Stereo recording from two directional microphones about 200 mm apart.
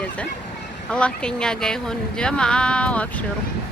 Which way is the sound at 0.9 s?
5° left (ahead or behind).